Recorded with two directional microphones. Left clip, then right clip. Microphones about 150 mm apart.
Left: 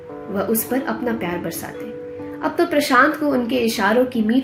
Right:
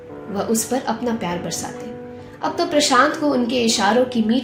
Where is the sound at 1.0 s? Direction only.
55° left (ahead or behind).